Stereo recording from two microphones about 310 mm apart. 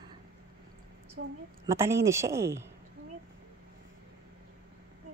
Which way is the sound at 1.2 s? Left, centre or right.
Right.